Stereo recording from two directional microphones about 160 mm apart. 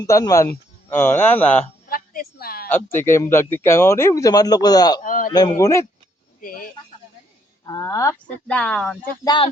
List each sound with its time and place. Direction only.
0.0 s speech: 20° left (ahead or behind)
1.9 s a sound: 70° left (ahead or behind)
2.6 s speech: 15° left (ahead or behind)
5.0 s speech: 60° left (ahead or behind)
5.3 s speech: 25° left (ahead or behind)
6.4 s a sound: 60° left (ahead or behind)
7.6 s speech: 20° left (ahead or behind)
8.4 s speech: 5° left (ahead or behind)
9.2 s speech: 30° left (ahead or behind)